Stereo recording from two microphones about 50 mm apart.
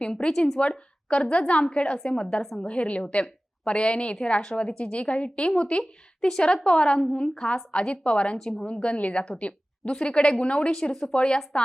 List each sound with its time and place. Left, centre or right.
0.0 s a woman's voice: centre